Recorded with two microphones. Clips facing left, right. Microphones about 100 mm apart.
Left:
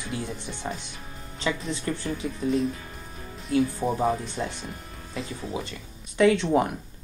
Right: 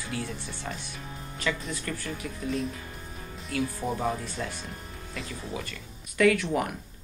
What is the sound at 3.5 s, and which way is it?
Speech, 30° left (ahead or behind).